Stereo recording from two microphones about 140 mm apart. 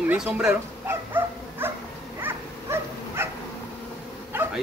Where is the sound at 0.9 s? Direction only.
15° right (ahead or behind).